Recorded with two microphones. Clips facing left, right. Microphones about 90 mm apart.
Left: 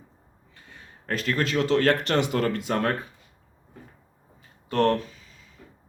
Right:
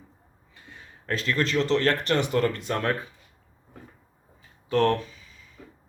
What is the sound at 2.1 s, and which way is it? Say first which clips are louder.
Speech: even; 50° left (ahead or behind).